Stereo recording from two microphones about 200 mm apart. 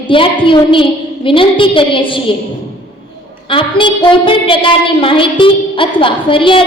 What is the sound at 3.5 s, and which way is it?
A woman's voice, 25° left (ahead or behind).